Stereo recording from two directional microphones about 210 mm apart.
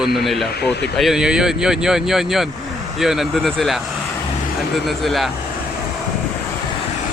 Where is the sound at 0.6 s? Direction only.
50° left (ahead or behind).